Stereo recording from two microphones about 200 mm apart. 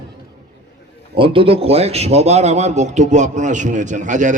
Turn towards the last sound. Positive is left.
turn(degrees=-40)  # may be behind; listen again after turning